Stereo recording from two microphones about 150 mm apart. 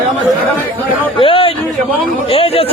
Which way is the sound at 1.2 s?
35° left (ahead or behind).